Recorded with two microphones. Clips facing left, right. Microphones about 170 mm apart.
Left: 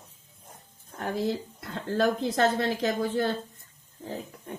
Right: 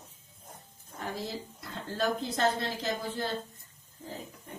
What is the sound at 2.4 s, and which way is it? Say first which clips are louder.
Speech: left 5 dB; 70° left (ahead or behind).